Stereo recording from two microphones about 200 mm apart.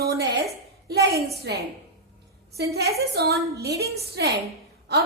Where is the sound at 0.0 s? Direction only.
55° right (ahead or behind).